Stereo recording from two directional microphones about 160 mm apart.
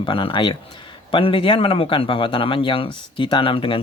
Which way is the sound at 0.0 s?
30° left (ahead or behind).